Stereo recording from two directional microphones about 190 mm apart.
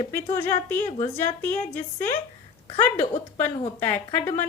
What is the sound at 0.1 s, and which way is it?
Speech, 10° left (ahead or behind).